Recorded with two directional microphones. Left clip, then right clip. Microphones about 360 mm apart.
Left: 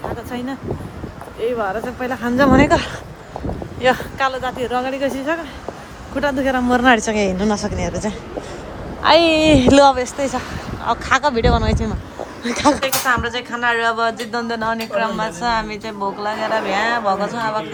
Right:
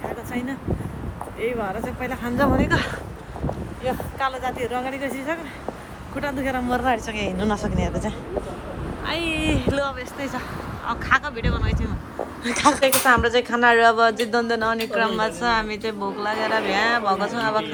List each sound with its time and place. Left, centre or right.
1.4 s speech: centre
3.8 s speech: left
4.4 s speech: centre